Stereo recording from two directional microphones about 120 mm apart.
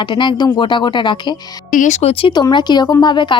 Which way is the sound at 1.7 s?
80° left.